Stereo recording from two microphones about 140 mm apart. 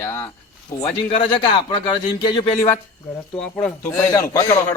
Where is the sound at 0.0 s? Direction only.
15° left (ahead or behind).